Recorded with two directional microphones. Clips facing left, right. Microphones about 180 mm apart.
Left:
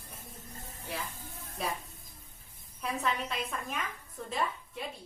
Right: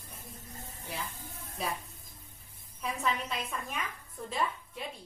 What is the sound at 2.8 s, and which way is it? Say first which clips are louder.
A woman's voice: even; centre (ahead or behind).